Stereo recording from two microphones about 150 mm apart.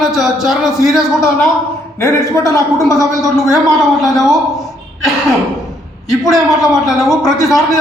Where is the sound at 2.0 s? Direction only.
20° left (ahead or behind).